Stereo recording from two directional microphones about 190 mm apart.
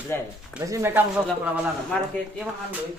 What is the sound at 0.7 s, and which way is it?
Speech, 15° right (ahead or behind).